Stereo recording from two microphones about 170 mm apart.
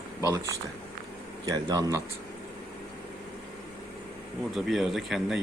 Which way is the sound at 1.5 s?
20° right (ahead or behind).